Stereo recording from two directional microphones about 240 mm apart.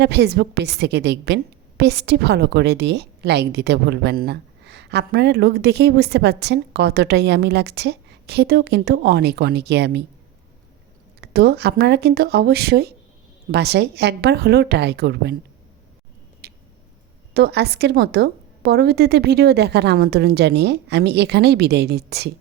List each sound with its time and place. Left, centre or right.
0.0 s a woman's voice: right
11.2 s a woman's voice: right
16.4 s a sound: right
17.3 s a woman's voice: right